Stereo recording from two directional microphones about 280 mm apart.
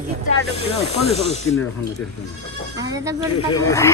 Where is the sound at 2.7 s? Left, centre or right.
Centre.